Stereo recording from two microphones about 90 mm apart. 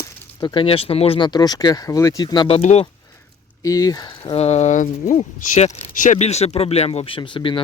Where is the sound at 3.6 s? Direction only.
40° left (ahead or behind).